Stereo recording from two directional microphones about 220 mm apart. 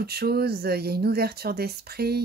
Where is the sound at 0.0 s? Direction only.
45° right (ahead or behind).